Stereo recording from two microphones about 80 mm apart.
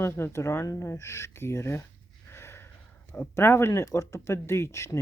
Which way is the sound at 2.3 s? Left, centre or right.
Left.